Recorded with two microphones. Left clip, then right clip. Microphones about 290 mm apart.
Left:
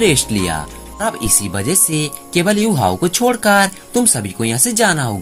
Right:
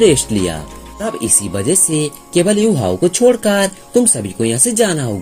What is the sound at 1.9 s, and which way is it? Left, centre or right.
Speech, left.